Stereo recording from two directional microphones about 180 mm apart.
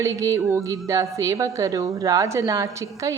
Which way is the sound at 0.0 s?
15° right (ahead or behind).